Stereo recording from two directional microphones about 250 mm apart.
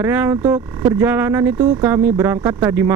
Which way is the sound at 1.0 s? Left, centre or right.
Centre.